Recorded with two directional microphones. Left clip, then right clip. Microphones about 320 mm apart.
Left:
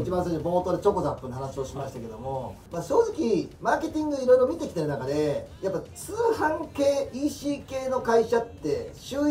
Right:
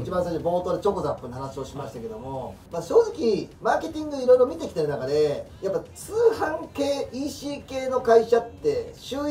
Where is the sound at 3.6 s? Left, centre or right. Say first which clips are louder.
Right 1 dB; centre.